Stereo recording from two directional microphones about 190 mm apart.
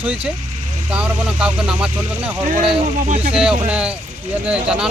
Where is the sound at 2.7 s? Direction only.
35° right (ahead or behind).